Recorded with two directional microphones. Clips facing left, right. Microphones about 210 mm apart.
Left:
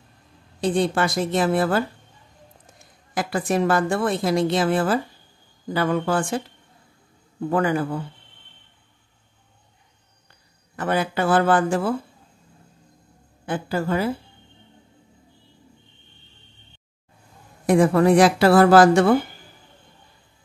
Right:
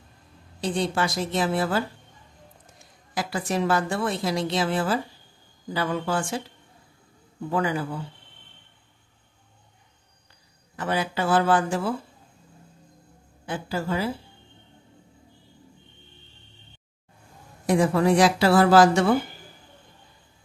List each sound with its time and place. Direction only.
0.6 s a woman's voice: 55° left (ahead or behind)
3.2 s a woman's voice: 55° left (ahead or behind)
7.4 s a woman's voice: 55° left (ahead or behind)
10.8 s a woman's voice: 55° left (ahead or behind)
13.5 s a woman's voice: 55° left (ahead or behind)
17.6 s a woman's voice: 55° left (ahead or behind)